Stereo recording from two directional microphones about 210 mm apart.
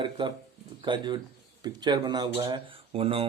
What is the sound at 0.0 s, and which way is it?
Speech, 20° right (ahead or behind).